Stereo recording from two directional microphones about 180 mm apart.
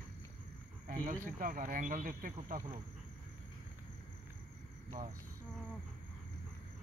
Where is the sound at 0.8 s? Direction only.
50° right (ahead or behind).